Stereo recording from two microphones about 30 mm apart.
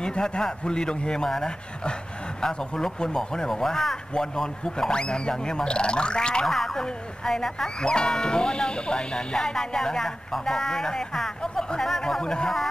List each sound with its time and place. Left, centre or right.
0.0 s a man's voice: left
2.4 s speech: left
5.0 s speech: left
6.4 s speech: centre
7.8 s speech: left